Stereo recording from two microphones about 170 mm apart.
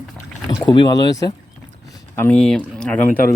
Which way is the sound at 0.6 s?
25° left (ahead or behind).